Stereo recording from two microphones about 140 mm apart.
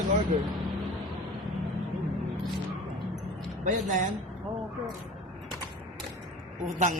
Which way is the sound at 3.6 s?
60° right (ahead or behind).